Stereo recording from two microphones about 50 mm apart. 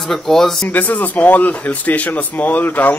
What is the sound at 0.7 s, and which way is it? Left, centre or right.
Speech, left.